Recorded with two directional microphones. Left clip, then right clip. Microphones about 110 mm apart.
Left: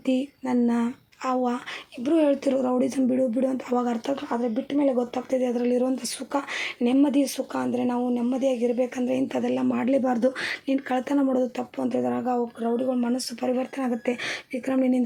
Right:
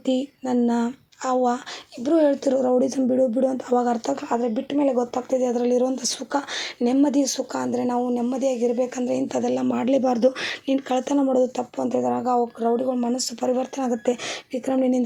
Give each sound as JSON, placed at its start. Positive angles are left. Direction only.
{"t": 0.0, "sound": "speech", "side_deg": -25}
{"t": 4.3, "sound": "speech", "side_deg": -50}
{"t": 14.3, "sound": "speech", "side_deg": -25}